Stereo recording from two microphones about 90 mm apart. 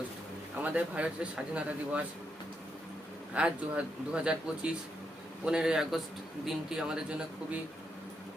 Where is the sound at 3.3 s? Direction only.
15° right (ahead or behind).